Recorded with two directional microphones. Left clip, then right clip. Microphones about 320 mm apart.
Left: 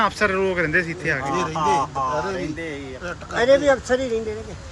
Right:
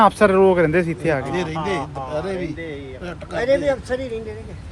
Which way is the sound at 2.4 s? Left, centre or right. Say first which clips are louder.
Even; left.